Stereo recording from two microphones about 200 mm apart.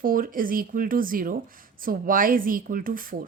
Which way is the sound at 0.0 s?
45° right (ahead or behind).